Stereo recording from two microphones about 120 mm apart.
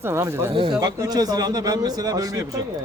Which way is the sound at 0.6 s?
35° right (ahead or behind).